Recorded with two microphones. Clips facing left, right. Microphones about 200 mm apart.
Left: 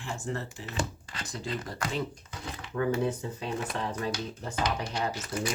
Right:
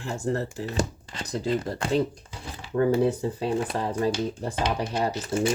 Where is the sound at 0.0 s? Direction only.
40° right (ahead or behind).